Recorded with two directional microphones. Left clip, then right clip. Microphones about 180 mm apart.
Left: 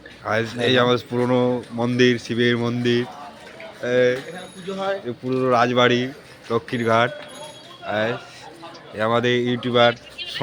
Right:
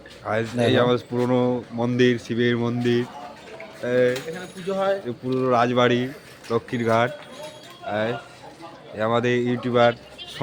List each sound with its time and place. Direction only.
0.3 s speech: 5° left (ahead or behind)
4.7 s mechanisms: 50° right (ahead or behind)
5.0 s speech: centre (ahead or behind)